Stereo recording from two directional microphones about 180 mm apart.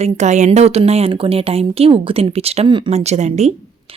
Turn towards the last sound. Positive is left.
turn(degrees=-40)  # may be behind; listen again after turning